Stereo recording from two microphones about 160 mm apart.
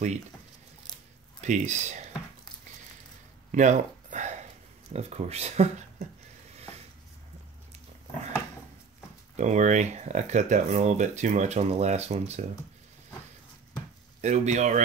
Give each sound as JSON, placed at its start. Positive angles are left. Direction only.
{"t": 1.4, "sound": "speech", "side_deg": -50}
{"t": 3.5, "sound": "a sound", "side_deg": -50}
{"t": 4.9, "sound": "speech", "side_deg": -40}
{"t": 9.4, "sound": "speech", "side_deg": -50}
{"t": 14.2, "sound": "speech", "side_deg": -45}